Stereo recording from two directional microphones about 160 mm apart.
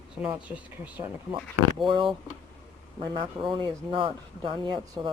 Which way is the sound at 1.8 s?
30° right (ahead or behind).